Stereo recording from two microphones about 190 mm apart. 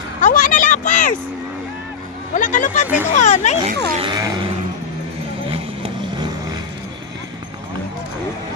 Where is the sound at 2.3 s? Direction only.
45° left (ahead or behind).